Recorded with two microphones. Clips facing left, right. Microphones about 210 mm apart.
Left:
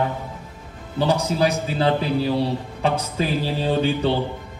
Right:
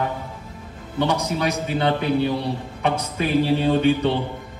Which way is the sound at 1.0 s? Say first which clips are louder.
Left 2 dB; 30° left (ahead or behind).